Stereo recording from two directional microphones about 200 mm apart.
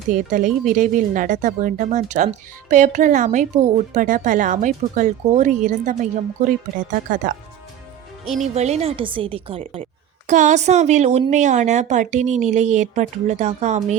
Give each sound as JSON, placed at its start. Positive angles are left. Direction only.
{"t": 0.1, "sound": "speech", "side_deg": -40}
{"t": 8.4, "sound": "a woman's voice", "side_deg": -35}